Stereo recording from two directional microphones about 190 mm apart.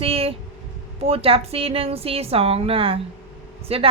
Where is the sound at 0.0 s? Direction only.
30° right (ahead or behind).